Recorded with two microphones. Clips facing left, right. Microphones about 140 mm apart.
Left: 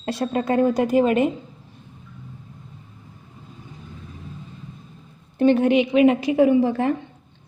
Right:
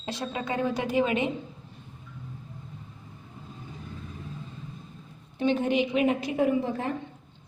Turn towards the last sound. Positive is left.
turn(degrees=80)